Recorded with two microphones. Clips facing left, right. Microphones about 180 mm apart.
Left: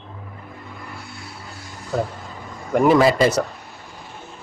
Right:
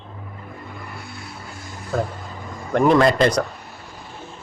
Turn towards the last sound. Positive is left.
turn(degrees=5)  # may be behind; listen again after turning